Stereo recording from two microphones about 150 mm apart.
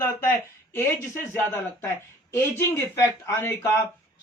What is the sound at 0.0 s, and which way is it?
Speech, 15° left (ahead or behind).